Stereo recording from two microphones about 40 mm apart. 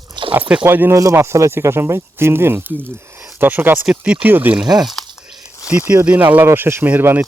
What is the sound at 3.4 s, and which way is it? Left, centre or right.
Speech, right.